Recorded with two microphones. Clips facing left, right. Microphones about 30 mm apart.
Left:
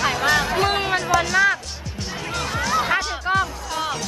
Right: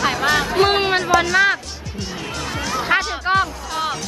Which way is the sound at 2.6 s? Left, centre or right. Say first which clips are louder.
Left 3 dB; centre.